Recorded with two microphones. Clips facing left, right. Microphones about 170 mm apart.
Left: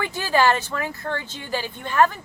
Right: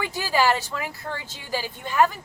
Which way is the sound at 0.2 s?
10° right (ahead or behind).